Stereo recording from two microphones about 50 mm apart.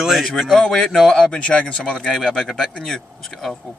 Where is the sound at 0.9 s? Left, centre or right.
Centre.